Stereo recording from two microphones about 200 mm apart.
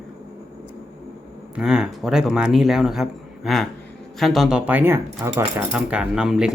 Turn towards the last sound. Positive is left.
turn(degrees=0)  # may be behind; listen again after turning